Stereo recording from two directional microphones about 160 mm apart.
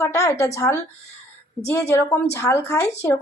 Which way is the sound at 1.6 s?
15° left (ahead or behind).